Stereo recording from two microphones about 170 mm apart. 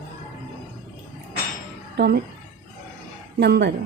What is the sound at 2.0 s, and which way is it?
Speech, 70° right (ahead or behind).